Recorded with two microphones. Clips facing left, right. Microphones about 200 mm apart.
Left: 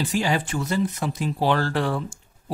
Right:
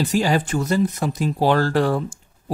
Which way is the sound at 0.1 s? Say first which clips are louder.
Right 4 dB; 40° right (ahead or behind).